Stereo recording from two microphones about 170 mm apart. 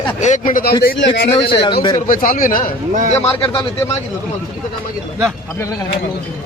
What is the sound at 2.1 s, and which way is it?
Speech, 55° left (ahead or behind).